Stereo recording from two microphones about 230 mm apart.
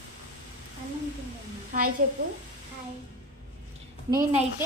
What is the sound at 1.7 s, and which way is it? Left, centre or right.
Speech, right.